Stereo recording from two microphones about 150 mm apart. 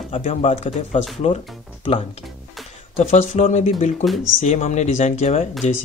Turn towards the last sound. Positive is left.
turn(degrees=50)  # may be behind; listen again after turning